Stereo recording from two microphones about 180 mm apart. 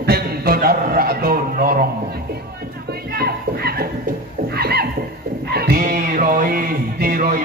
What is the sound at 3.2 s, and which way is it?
Speech, 60° right (ahead or behind).